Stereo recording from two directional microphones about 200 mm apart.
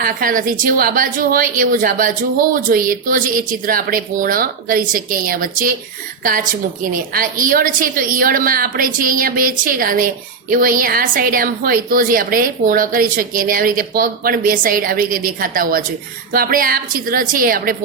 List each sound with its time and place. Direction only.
0.0 s speech: 45° right (ahead or behind)
7.1 s speech: 45° right (ahead or behind)